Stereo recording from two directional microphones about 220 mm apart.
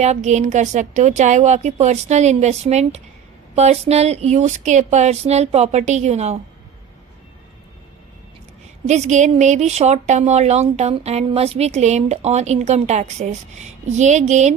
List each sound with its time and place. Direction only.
0.0 s a woman's voice: 30° right (ahead or behind)
8.9 s a woman's voice: 30° right (ahead or behind)